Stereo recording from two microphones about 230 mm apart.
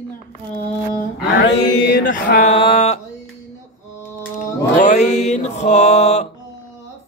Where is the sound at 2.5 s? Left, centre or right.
Left.